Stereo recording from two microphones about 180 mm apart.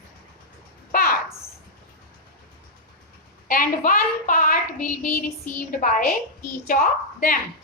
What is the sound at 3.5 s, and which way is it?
A woman's voice, 50° left (ahead or behind).